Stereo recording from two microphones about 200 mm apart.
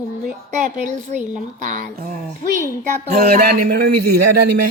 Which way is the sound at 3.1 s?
45° right (ahead or behind).